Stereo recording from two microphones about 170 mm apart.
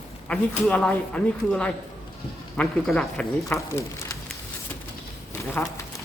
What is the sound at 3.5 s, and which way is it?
Speech, 15° left (ahead or behind).